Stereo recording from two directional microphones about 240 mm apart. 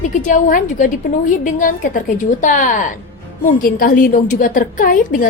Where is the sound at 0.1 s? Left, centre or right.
Left.